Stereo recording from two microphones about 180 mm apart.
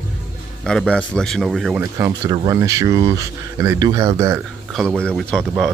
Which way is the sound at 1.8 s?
20° right (ahead or behind).